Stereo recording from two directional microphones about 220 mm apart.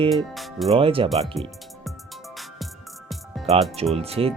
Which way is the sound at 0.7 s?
25° right (ahead or behind).